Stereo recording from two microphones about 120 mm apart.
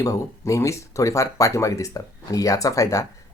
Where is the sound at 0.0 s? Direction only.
25° left (ahead or behind).